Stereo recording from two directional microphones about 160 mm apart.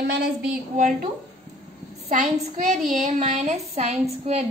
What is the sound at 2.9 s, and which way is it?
A woman's voice, 50° right (ahead or behind).